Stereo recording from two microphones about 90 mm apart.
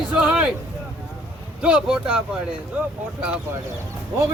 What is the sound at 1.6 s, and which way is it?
Speech, 10° right (ahead or behind).